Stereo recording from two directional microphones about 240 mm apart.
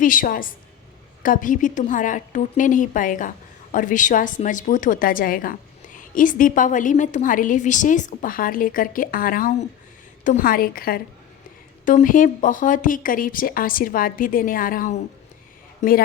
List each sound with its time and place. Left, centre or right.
0.0 s a woman's voice: left